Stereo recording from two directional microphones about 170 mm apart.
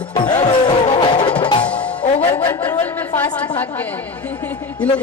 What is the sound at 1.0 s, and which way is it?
Music, 30° left (ahead or behind).